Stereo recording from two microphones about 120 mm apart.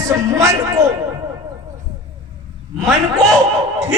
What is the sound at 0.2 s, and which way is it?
Speech, 25° right (ahead or behind).